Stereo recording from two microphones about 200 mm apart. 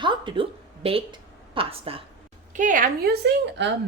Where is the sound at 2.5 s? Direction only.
40° right (ahead or behind).